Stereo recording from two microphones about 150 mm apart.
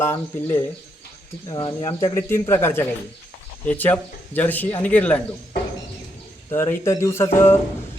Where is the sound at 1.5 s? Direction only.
30° left (ahead or behind); by 5.2 s 10° left (ahead or behind).